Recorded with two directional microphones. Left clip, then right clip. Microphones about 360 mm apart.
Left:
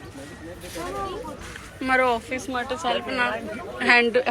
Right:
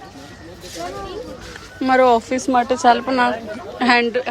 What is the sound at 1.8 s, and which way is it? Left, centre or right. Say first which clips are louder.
A woman's voice: right 7 dB; centre.